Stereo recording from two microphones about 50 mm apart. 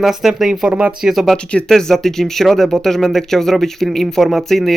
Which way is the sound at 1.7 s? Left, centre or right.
Centre.